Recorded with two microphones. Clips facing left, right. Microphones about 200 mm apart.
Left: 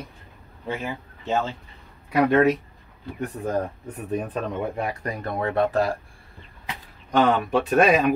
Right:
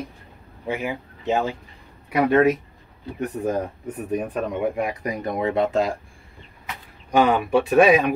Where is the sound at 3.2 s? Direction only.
20° right (ahead or behind).